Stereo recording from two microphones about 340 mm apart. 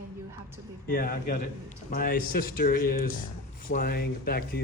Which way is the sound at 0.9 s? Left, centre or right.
Left.